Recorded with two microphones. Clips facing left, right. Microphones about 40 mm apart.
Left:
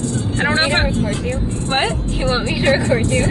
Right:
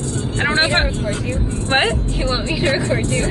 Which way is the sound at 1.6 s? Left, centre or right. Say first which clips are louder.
Right 2 dB; right.